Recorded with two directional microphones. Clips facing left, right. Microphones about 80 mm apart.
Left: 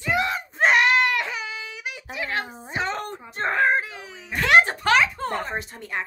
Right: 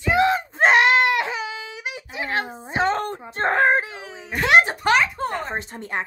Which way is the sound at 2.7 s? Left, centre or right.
Right.